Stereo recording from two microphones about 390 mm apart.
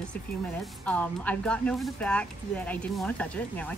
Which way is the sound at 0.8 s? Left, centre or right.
Centre.